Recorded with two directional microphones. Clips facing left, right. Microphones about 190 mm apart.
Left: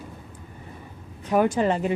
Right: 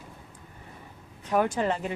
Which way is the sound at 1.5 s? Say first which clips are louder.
Left 5 dB; 20° left (ahead or behind).